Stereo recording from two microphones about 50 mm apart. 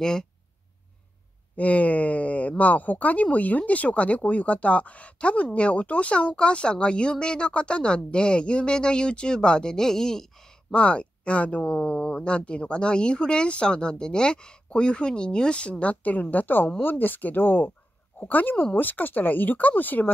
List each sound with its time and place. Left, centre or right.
0.0 s speech: centre
1.6 s speech: left; by 10.5 s centre
10.7 s speech: left